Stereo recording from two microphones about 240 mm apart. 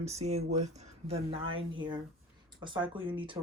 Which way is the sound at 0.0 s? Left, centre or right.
Right.